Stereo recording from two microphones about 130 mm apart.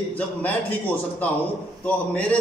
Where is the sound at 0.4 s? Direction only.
10° left (ahead or behind).